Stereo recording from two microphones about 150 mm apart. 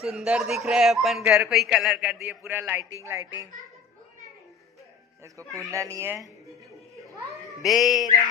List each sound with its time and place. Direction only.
0.0 s a man's voice: 5° right (ahead or behind)
5.6 s speech: 20° right (ahead or behind)
7.6 s a man's voice: centre (ahead or behind)